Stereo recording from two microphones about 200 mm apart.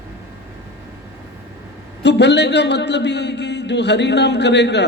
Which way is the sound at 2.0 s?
60° left (ahead or behind).